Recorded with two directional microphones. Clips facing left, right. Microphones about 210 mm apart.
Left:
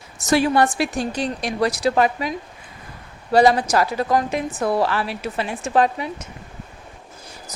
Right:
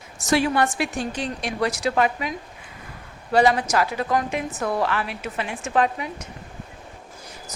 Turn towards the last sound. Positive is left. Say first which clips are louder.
# left 3 dB
turn(degrees=30)  # may be behind; listen again after turning